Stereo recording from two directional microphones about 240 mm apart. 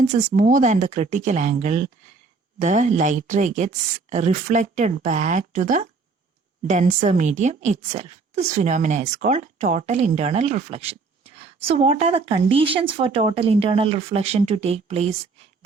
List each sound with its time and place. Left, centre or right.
0.0 s a woman's voice: right